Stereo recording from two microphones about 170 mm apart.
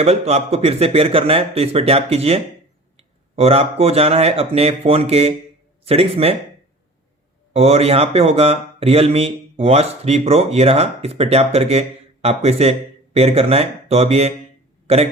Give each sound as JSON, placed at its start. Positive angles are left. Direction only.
{"t": 0.0, "sound": "speech", "side_deg": -40}
{"t": 7.5, "sound": "speech", "side_deg": -35}